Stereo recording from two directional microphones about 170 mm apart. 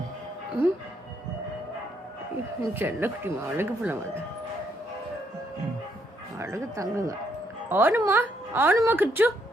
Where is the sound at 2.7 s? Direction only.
15° right (ahead or behind).